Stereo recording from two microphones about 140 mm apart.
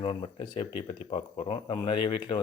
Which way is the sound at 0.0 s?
35° left (ahead or behind).